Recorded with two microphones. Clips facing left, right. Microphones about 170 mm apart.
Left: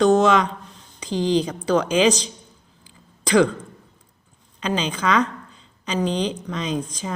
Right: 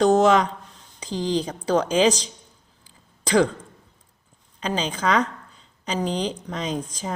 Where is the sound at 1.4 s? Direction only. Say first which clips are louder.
Left 1 dB; 35° right (ahead or behind).